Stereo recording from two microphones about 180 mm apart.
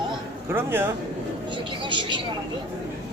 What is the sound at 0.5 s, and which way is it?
Speech, 10° right (ahead or behind).